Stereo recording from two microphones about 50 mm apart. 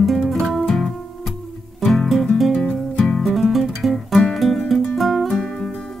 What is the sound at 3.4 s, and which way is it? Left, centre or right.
Guitar, centre.